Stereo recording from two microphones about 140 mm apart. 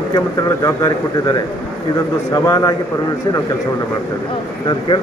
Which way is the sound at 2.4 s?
25° left (ahead or behind).